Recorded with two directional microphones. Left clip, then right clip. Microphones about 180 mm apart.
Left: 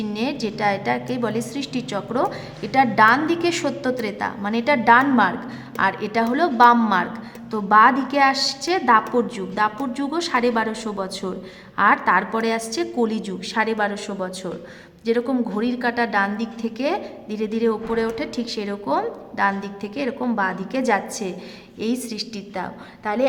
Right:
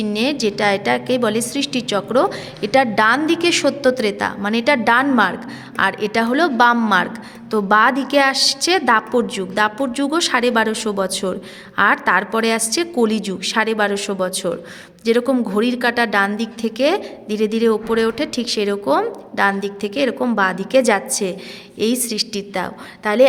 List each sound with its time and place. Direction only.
0.0 s a woman's voice: 20° right (ahead or behind)